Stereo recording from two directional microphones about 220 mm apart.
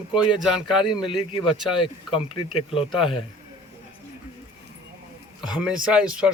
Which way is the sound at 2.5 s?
25° left (ahead or behind).